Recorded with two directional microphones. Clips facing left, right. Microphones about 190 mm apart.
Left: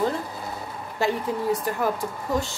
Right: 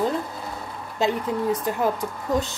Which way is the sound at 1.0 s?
20° right (ahead or behind).